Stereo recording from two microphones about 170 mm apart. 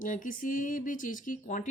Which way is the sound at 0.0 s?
50° left (ahead or behind).